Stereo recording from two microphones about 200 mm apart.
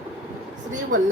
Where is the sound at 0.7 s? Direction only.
40° right (ahead or behind).